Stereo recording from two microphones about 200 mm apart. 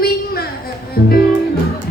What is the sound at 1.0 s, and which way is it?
Speech, 50° left (ahead or behind).